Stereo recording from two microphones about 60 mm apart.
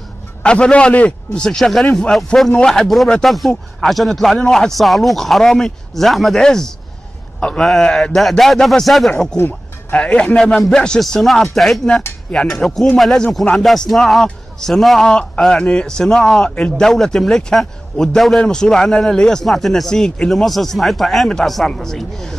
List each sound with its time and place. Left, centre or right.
0.4 s a man's voice: centre
9.4 s music: left
9.9 s a man's voice: centre
15.0 s a man's voice: centre
20.2 s a man's voice: centre